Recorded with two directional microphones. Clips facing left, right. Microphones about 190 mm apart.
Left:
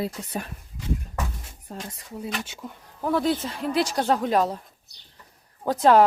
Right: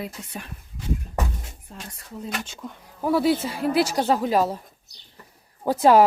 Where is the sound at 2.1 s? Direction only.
10° left (ahead or behind).